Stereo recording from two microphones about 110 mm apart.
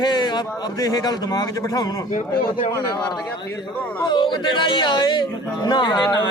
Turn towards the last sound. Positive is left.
turn(degrees=40)  # may be behind; listen again after turning